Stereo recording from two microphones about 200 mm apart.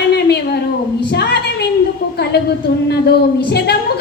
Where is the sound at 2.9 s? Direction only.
55° left (ahead or behind).